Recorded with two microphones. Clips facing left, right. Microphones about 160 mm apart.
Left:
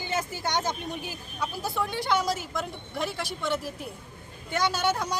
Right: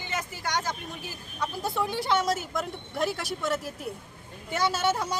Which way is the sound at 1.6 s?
Centre (ahead or behind).